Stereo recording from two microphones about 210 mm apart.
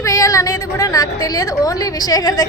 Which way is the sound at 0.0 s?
15° left (ahead or behind).